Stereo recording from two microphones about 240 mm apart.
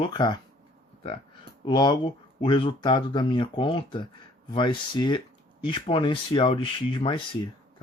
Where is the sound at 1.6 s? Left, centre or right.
Centre.